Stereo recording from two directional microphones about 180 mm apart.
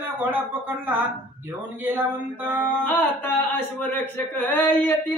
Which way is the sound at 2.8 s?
10° left (ahead or behind).